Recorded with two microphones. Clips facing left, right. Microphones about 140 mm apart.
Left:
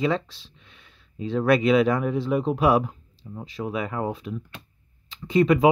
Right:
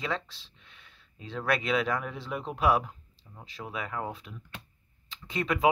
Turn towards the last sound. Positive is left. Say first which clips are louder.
# left 9 dB
turn(degrees=5)  # may be behind; listen again after turning